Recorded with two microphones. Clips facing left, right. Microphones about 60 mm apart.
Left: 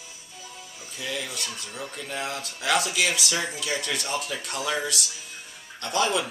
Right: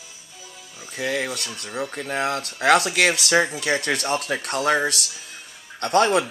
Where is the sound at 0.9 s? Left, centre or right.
Right.